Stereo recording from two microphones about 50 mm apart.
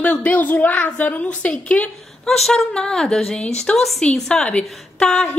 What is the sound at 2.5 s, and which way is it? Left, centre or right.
A woman's voice, centre.